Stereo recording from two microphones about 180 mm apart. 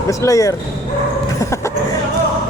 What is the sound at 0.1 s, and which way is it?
Speech, 20° left (ahead or behind).